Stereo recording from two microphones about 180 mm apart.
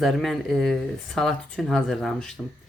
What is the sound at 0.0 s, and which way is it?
Speech, centre (ahead or behind).